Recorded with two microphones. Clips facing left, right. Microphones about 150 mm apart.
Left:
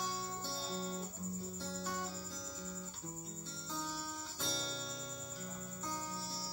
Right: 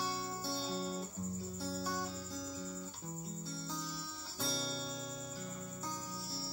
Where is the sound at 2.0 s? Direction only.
5° right (ahead or behind).